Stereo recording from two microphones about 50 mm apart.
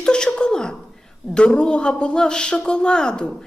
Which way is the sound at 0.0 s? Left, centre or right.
Centre.